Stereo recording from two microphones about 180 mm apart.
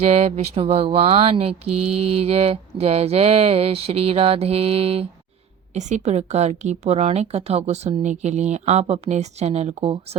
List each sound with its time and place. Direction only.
0.0 s speech: 35° right (ahead or behind)